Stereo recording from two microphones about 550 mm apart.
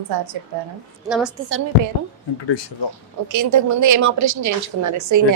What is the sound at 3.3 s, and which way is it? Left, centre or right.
A woman's voice, right.